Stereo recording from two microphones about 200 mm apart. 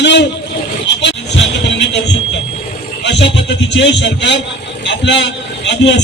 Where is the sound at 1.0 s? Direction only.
65° left (ahead or behind).